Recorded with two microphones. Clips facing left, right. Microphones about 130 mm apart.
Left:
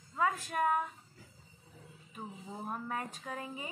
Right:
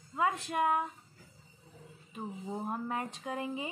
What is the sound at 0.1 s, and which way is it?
Speech, 25° right (ahead or behind).